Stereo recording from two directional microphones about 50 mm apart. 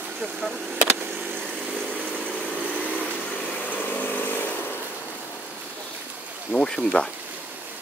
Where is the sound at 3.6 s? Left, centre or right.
Left.